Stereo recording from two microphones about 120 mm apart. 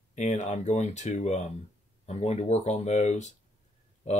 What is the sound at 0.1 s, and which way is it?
Speech, 80° left.